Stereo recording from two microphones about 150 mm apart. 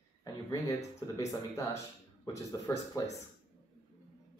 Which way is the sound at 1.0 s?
25° left (ahead or behind).